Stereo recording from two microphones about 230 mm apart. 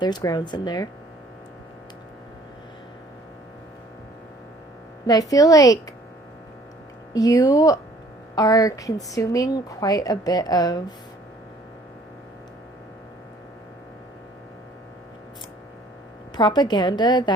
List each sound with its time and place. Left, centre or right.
0.0 s a woman's voice: centre
5.0 s a woman's voice: centre
7.1 s a woman's voice: centre
16.3 s a woman's voice: centre